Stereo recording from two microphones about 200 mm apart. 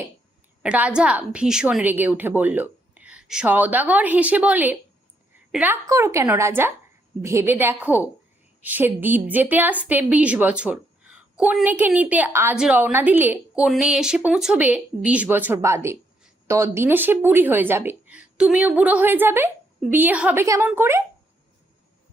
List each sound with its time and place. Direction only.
0.6 s a woman's voice: 5° right (ahead or behind)